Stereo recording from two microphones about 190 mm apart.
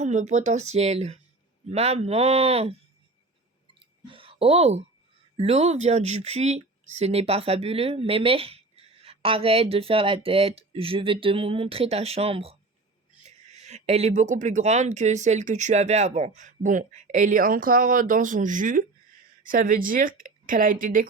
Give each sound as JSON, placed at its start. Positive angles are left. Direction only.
{"t": 0.0, "sound": "speech", "side_deg": -40}
{"t": 3.8, "sound": "clicking", "side_deg": -30}
{"t": 5.4, "sound": "a woman's voice", "side_deg": -35}